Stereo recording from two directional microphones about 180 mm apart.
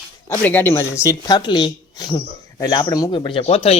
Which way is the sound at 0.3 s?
10° left (ahead or behind).